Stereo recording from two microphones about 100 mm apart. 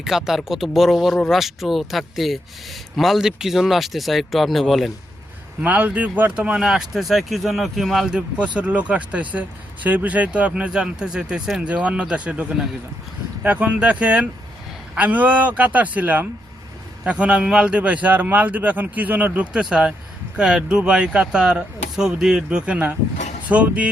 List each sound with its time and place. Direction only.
0.0 s speech: 5° right (ahead or behind)
5.6 s speech: 15° right (ahead or behind)